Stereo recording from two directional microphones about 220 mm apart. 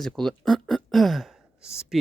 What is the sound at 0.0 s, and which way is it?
Speech, centre (ahead or behind).